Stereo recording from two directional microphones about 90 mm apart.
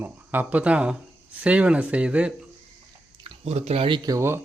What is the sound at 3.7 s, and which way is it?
Speech, 75° right (ahead or behind).